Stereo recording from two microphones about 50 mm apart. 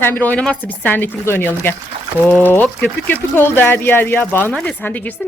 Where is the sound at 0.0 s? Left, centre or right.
Left.